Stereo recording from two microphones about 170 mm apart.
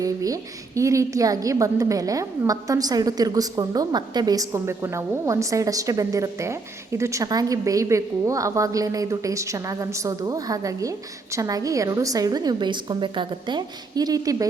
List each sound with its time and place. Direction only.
0.0 s a woman's voice: 20° right (ahead or behind)